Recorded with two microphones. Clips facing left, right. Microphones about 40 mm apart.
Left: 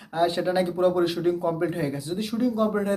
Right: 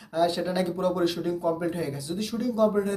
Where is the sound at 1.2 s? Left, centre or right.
Left.